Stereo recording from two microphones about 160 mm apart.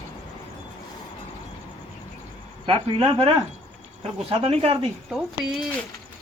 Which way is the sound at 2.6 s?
35° right (ahead or behind).